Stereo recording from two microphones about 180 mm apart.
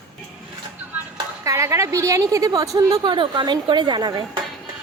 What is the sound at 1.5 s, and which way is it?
A woman's voice, 15° right (ahead or behind).